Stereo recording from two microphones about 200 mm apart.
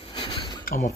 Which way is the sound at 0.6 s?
35° left (ahead or behind).